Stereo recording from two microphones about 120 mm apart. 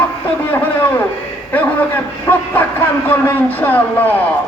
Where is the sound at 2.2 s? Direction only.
15° left (ahead or behind).